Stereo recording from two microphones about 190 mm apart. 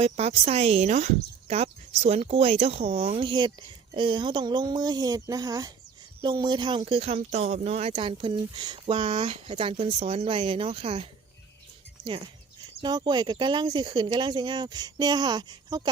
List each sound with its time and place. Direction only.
0.0 s speech: 35° right (ahead or behind)
12.8 s speech: 25° right (ahead or behind)